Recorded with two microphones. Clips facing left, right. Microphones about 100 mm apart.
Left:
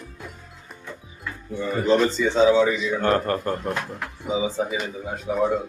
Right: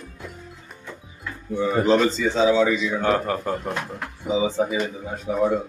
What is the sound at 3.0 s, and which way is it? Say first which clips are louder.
Speech: even; 5° right (ahead or behind).